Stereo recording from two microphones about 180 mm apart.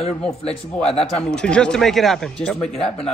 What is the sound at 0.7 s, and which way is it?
Speech, 5° left (ahead or behind).